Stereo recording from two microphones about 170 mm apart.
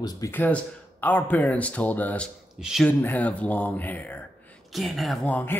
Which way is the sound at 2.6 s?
5° right (ahead or behind).